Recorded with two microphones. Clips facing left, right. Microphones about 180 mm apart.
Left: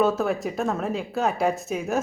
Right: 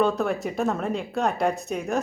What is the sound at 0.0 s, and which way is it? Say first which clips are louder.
Speech: left 1 dB; 5° left (ahead or behind).